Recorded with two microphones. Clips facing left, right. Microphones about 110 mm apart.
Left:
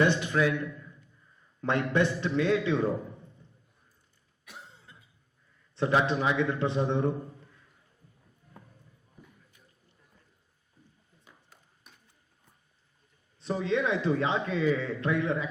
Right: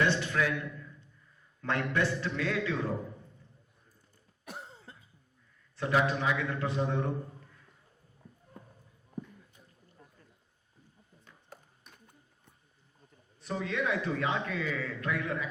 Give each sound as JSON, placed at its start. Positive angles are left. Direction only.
{"t": 0.0, "sound": "a man's voice", "side_deg": 15}
{"t": 1.6, "sound": "a man's voice", "side_deg": 20}
{"t": 4.4, "sound": "cough", "side_deg": -40}
{"t": 5.7, "sound": "a man's voice", "side_deg": 25}
{"t": 11.5, "sound": "a sound", "side_deg": -50}
{"t": 13.4, "sound": "a man's voice", "side_deg": 25}